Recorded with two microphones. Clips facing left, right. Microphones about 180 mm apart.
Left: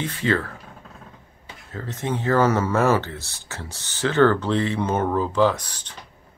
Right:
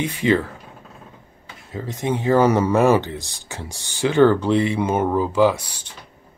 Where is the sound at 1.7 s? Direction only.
15° right (ahead or behind).